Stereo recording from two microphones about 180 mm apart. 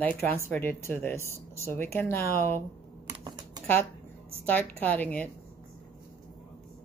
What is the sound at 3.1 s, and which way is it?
Typing, 25° right (ahead or behind).